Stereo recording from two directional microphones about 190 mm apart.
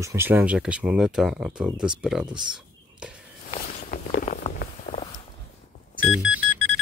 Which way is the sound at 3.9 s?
45° left (ahead or behind).